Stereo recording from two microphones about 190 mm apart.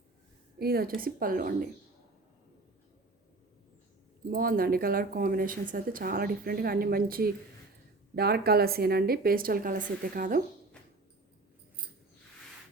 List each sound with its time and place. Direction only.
0.6 s speech: 50° right (ahead or behind)
4.3 s speech: 50° right (ahead or behind)